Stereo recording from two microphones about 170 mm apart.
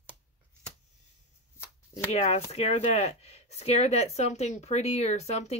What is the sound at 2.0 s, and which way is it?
Speech, 35° left (ahead or behind).